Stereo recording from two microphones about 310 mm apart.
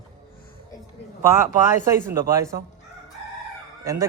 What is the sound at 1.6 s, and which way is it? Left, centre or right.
Speech, centre.